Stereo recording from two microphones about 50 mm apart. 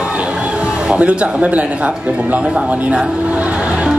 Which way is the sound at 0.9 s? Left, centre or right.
Right.